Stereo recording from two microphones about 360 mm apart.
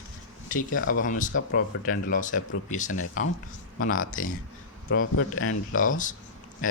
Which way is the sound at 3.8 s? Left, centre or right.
Left.